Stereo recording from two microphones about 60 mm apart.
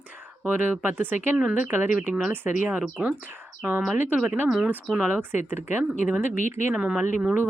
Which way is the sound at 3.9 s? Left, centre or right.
Right.